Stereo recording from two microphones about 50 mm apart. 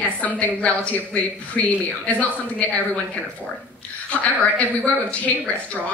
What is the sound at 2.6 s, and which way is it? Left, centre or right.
Speech, left.